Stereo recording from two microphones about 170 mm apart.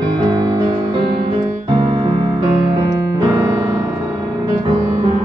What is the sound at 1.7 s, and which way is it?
Music, 30° right (ahead or behind).